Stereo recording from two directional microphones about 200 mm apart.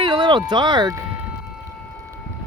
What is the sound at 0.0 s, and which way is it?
Speech, 20° right (ahead or behind).